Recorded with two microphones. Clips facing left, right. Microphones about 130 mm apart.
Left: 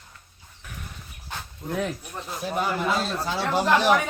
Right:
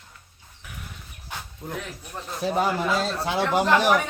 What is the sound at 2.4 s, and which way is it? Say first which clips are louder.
Speech: right 4 dB; 30° right (ahead or behind).